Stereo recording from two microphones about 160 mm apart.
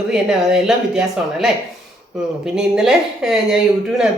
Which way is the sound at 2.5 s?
5° right (ahead or behind).